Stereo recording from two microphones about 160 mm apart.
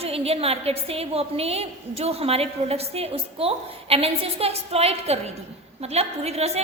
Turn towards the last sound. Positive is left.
turn(degrees=-40)  # may be behind; listen again after turning